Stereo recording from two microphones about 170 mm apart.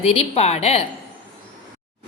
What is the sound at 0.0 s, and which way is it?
Speech, 35° left (ahead or behind).